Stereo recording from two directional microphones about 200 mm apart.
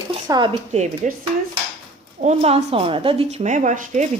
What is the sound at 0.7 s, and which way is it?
Speech, 35° right (ahead or behind).